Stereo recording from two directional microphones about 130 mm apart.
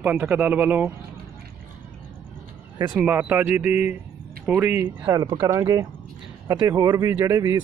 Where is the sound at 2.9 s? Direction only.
10° right (ahead or behind).